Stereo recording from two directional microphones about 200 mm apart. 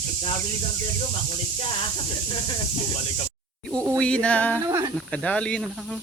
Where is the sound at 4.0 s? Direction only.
5° left (ahead or behind).